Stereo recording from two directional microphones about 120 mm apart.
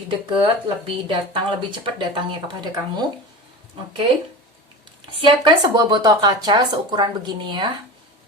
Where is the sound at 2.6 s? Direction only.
35° right (ahead or behind).